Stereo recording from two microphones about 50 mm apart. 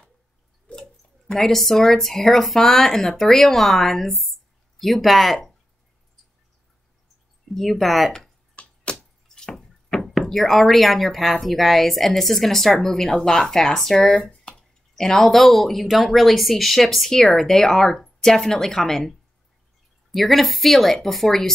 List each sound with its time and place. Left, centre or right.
0.7 s speech: centre
7.5 s speech: centre
8.6 s a sound: left
9.3 s drip: centre
10.0 s speech: centre